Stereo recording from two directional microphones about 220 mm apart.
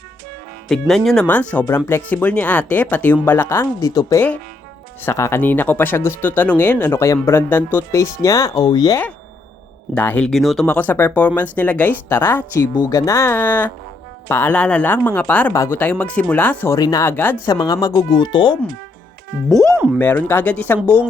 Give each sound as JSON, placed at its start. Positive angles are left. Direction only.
{"t": 0.7, "sound": "speech", "side_deg": 0}